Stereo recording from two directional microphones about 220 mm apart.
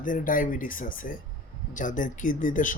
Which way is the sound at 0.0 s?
40° left (ahead or behind).